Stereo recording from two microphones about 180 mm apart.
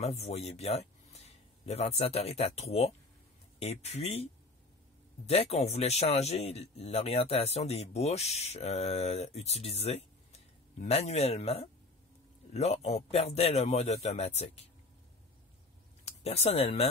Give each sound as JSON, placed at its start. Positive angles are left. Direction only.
{"t": 0.0, "sound": "a man's voice", "side_deg": 35}
{"t": 5.2, "sound": "speech", "side_deg": 35}
{"t": 16.1, "sound": "speech", "side_deg": 35}